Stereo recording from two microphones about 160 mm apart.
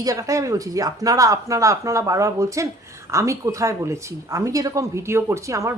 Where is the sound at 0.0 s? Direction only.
20° right (ahead or behind).